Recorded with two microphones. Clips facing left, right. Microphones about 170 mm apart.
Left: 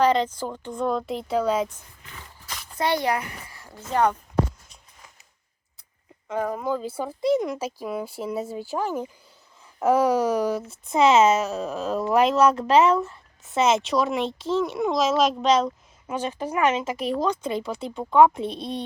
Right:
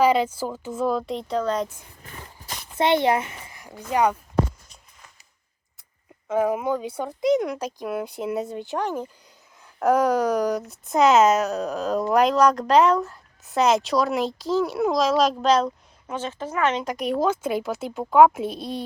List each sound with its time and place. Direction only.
0.0 s speech: 10° right (ahead or behind); by 1.6 s 5° left (ahead or behind)
2.7 s a child's voice: 25° right (ahead or behind)
6.2 s speech: 5° right (ahead or behind)
16.1 s speech: 10° left (ahead or behind)